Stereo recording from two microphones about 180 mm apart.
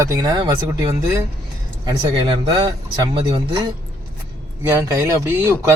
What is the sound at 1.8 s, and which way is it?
Speech, 30° right (ahead or behind).